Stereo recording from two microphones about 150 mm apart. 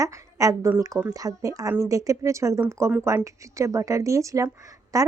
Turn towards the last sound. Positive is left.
turn(degrees=-20)  # may be behind; listen again after turning